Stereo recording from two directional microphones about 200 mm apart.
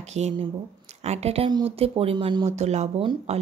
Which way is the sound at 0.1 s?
35° right (ahead or behind).